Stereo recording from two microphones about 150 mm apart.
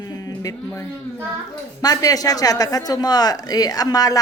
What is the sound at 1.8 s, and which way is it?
Speech, 25° left (ahead or behind).